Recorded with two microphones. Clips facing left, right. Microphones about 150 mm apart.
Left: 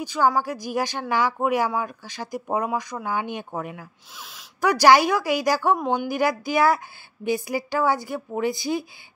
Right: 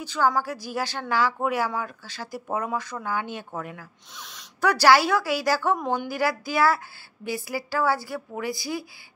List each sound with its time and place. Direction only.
0.0 s speech: 15° left (ahead or behind)
4.1 s a woman's voice: 5° left (ahead or behind); by 8.8 s 20° left (ahead or behind)